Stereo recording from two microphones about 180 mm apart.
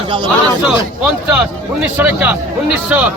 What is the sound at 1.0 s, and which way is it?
A man's voice, 10° right (ahead or behind).